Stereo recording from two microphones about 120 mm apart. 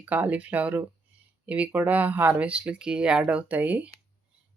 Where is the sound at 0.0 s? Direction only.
15° right (ahead or behind).